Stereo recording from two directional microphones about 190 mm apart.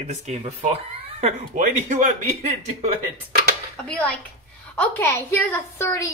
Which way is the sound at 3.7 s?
5° left (ahead or behind).